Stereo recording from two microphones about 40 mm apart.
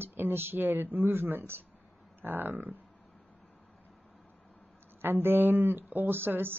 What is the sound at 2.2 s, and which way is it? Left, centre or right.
Speech, right.